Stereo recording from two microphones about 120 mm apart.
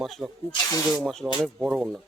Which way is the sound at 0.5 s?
30° left (ahead or behind).